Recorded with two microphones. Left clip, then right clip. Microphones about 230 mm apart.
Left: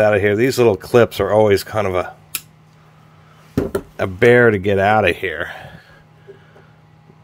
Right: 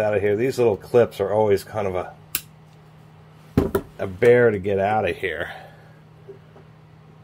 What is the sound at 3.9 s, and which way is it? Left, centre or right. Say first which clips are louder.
Speech: left 4 dB; left.